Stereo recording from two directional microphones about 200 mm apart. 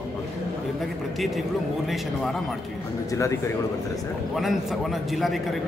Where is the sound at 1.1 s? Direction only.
Centre (ahead or behind).